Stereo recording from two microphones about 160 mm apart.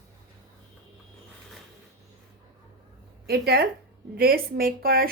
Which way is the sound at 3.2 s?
75° right (ahead or behind).